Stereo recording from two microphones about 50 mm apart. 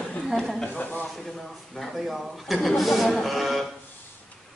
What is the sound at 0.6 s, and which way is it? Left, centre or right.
Speech, left.